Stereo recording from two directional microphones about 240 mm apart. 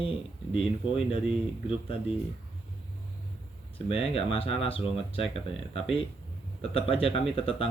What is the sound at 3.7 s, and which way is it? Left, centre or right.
Speech, left.